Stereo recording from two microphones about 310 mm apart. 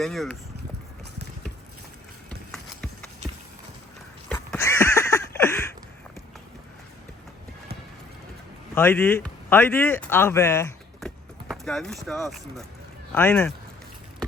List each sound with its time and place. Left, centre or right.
0.0 s speech: centre
2.5 s clip-clop: centre
4.3 s a sound: centre
8.7 s speech: centre